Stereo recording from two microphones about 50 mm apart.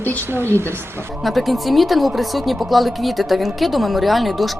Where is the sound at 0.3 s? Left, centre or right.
Right.